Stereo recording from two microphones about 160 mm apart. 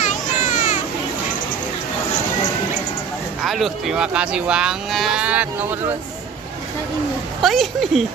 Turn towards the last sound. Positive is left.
turn(degrees=0)  # may be behind; listen again after turning